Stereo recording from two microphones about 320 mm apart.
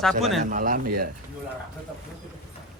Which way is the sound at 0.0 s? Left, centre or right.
Centre.